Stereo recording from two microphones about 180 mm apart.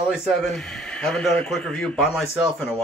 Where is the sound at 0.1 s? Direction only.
Centre (ahead or behind).